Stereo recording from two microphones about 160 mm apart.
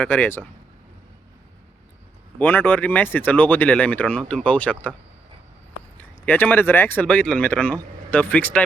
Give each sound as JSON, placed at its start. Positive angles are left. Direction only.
{"t": 0.0, "sound": "speech", "side_deg": 10}
{"t": 2.4, "sound": "speech", "side_deg": 10}
{"t": 6.0, "sound": "speech", "side_deg": 10}